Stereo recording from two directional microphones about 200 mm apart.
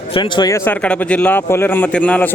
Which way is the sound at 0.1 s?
25° left (ahead or behind).